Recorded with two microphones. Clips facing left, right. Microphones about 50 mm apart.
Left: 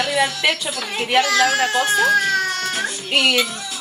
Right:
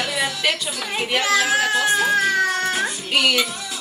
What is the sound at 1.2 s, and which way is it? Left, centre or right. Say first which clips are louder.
Speech: left 1 dB; centre.